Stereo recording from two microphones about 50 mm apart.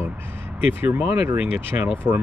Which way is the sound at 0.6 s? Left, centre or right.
Right.